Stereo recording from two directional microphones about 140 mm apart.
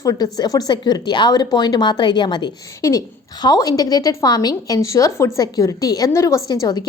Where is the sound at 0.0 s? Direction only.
25° left (ahead or behind).